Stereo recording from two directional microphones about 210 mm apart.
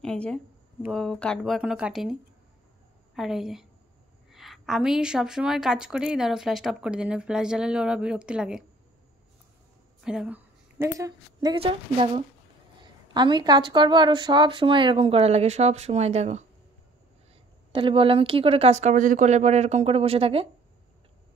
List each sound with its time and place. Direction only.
0.0 s a woman's voice: 5° left (ahead or behind)
3.2 s a woman's voice: centre (ahead or behind)
10.0 s a woman's voice: 5° right (ahead or behind); by 16.4 s 30° right (ahead or behind)
17.7 s speech: 25° right (ahead or behind)